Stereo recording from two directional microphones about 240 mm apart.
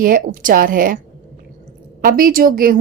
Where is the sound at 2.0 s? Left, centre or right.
Right.